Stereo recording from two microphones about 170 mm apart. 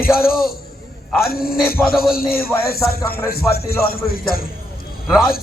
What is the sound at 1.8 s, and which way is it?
Speech, 15° left (ahead or behind).